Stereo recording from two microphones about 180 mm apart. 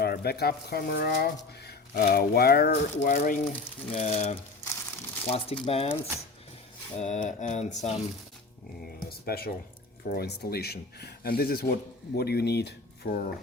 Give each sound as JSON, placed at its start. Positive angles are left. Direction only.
{"t": 0.0, "sound": "speech", "side_deg": 60}
{"t": 3.9, "sound": "a sound", "side_deg": 35}
{"t": 9.0, "sound": "speech", "side_deg": 60}